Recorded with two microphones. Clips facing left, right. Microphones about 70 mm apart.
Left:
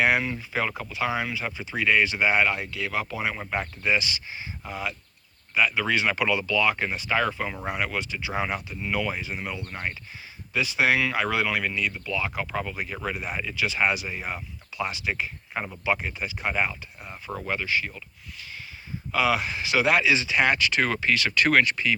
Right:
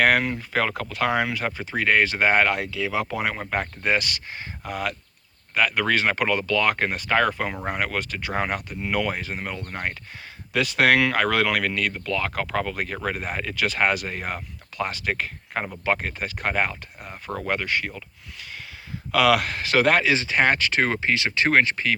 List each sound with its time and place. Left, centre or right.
0.0 s speech: right
1.7 s speech: right
7.6 s speech: right
10.5 s speech: right
13.4 s speech: right
17.4 s speech: right
19.1 s speech: right